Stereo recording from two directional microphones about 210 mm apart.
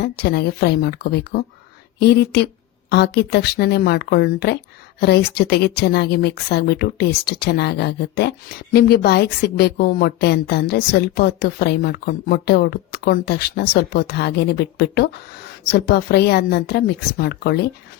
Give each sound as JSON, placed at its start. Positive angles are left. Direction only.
{"t": 0.0, "sound": "a woman's voice", "side_deg": 50}